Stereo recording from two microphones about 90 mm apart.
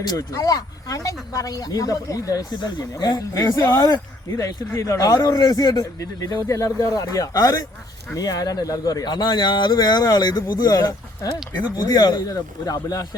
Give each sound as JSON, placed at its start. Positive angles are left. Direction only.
{"t": 0.1, "sound": "a man's voice", "side_deg": 40}
{"t": 2.9, "sound": "a man's voice", "side_deg": 40}